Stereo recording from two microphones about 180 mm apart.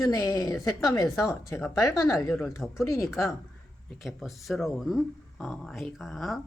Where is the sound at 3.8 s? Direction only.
Centre (ahead or behind).